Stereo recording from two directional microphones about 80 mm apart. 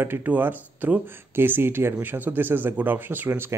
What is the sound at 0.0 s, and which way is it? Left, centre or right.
Speech, right.